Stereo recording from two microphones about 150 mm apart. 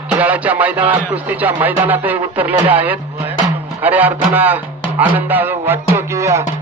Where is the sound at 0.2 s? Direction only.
10° right (ahead or behind).